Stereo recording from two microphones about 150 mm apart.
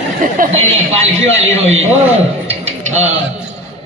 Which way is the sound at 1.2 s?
45° right (ahead or behind).